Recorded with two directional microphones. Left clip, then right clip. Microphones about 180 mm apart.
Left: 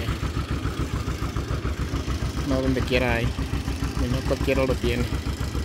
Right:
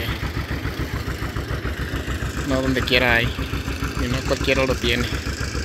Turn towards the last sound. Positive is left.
turn(degrees=45)  # may be behind; listen again after turning